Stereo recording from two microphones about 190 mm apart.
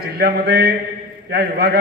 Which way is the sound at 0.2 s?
55° right (ahead or behind).